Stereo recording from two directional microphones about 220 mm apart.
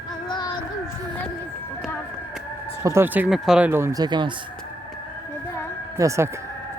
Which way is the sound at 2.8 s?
10° right (ahead or behind).